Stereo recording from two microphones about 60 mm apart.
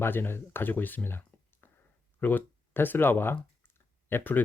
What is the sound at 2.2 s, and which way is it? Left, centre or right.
Speech, left.